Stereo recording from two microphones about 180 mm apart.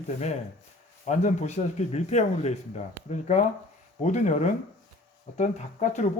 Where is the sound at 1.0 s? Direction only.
40° left (ahead or behind).